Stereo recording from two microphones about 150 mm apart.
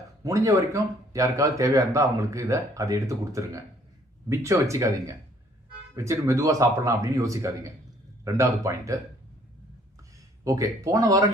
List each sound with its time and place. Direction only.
0.3 s speech: 20° right (ahead or behind)
10.4 s speech: 20° right (ahead or behind)